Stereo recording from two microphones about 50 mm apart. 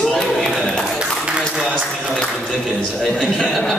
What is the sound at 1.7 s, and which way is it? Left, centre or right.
A man's voice, centre.